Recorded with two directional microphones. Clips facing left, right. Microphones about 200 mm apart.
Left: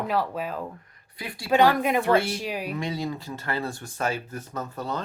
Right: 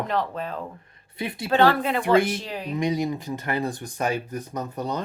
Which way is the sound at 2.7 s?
15° right (ahead or behind).